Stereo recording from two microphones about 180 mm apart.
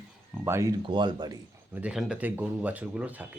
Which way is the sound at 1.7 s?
5° right (ahead or behind).